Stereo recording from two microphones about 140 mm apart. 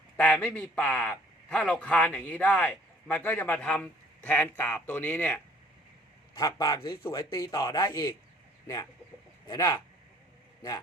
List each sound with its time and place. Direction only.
0.2 s a man's voice: 10° left (ahead or behind)
6.3 s a man's voice: 25° left (ahead or behind)
7.3 s speech: 20° left (ahead or behind)